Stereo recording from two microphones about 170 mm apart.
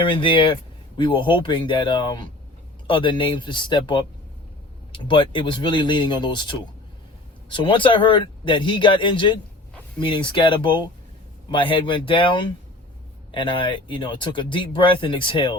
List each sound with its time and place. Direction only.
0.0 s speech: 30° left (ahead or behind)